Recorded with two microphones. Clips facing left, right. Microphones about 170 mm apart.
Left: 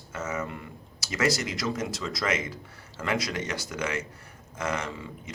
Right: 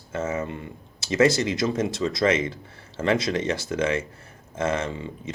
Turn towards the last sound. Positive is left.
turn(degrees=-25)  # may be behind; listen again after turning